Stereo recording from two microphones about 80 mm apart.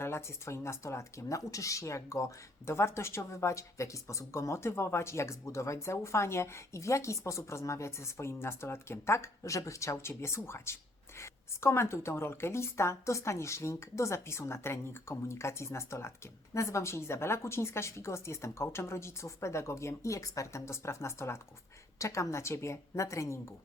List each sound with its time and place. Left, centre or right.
0.0 s speech: left